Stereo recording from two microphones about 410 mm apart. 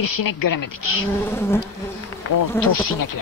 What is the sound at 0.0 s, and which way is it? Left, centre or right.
Speech, left.